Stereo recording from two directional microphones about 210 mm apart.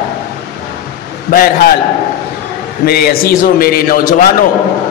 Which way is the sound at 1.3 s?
45° left (ahead or behind).